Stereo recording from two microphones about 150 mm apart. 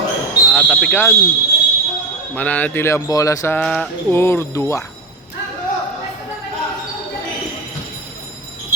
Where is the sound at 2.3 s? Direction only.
10° left (ahead or behind).